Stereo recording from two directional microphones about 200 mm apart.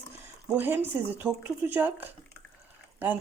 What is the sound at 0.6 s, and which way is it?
Speech, 10° right (ahead or behind).